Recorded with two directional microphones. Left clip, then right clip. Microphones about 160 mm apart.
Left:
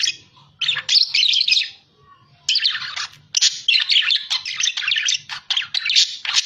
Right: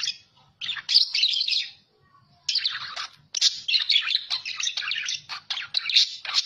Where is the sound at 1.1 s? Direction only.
30° right (ahead or behind).